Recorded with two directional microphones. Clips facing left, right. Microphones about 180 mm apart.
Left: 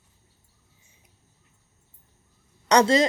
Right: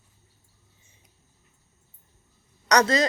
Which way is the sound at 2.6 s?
25° left (ahead or behind).